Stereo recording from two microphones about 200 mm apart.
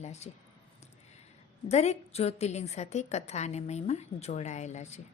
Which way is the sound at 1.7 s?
35° left (ahead or behind).